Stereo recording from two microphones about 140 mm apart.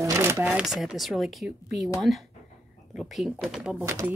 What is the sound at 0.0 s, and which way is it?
Speech, 20° right (ahead or behind).